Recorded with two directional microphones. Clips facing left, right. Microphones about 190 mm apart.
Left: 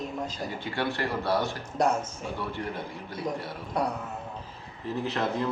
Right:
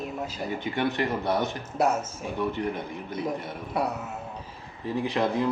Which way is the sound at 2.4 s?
20° right (ahead or behind).